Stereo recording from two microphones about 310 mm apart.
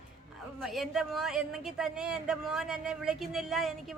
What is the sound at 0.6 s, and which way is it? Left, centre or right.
Speech, centre.